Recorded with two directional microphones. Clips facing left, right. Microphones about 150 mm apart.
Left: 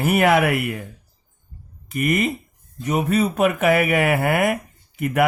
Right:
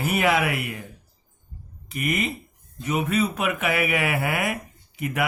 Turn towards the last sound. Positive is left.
turn(degrees=50)  # may be behind; listen again after turning